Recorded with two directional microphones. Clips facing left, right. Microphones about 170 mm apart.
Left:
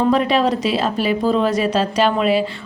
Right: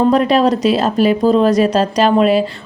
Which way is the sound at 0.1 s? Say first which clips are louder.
Right 4 dB; 40° right (ahead or behind).